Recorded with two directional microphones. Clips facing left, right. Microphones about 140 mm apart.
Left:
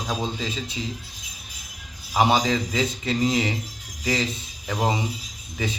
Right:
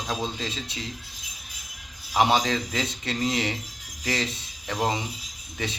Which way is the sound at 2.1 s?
5° left (ahead or behind).